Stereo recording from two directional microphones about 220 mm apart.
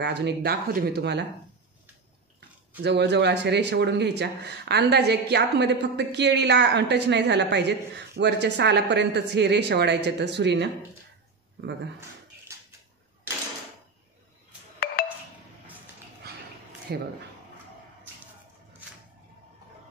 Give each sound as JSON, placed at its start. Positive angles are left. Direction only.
{"t": 0.0, "sound": "a woman's voice", "side_deg": -50}
{"t": 2.8, "sound": "a woman's voice", "side_deg": -50}
{"t": 16.2, "sound": "a sound", "side_deg": -45}
{"t": 16.9, "sound": "a woman's voice", "side_deg": -45}